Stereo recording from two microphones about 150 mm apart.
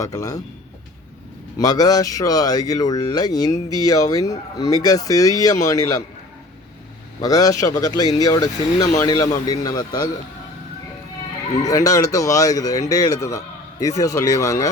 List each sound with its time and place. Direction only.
0.0 s speech: 20° left (ahead or behind)
1.5 s speech: 25° left (ahead or behind)
7.2 s speech: 25° left (ahead or behind)
11.6 s speech: 20° left (ahead or behind)